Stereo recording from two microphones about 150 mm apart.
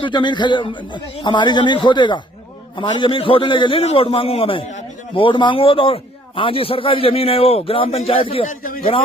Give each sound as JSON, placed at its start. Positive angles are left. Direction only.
{"t": 0.0, "sound": "a man's voice", "side_deg": 30}
{"t": 8.4, "sound": "a man's voice", "side_deg": 70}
{"t": 8.8, "sound": "a man's voice", "side_deg": 40}